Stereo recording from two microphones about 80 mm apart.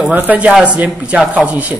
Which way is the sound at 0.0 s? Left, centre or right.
Right.